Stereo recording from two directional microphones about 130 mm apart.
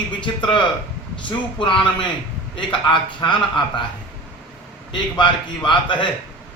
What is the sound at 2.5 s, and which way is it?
A man's voice, 40° left (ahead or behind).